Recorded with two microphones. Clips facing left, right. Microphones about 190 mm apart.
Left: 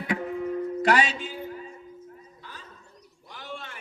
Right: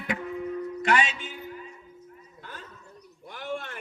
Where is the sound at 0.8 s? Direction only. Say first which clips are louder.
Left 2 dB; 35° left (ahead or behind).